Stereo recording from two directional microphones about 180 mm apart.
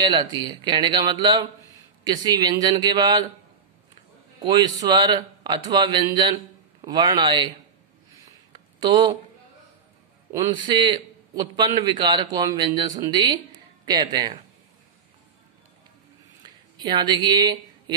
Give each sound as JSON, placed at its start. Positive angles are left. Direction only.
{"t": 0.0, "sound": "a man's voice", "side_deg": -20}
{"t": 1.6, "sound": "a sound", "side_deg": 20}
{"t": 2.0, "sound": "a man's voice", "side_deg": -20}
{"t": 4.4, "sound": "a man's voice", "side_deg": -25}
{"t": 8.7, "sound": "speech", "side_deg": -25}
{"t": 10.3, "sound": "a man's voice", "side_deg": -25}
{"t": 16.4, "sound": "a sound", "side_deg": -25}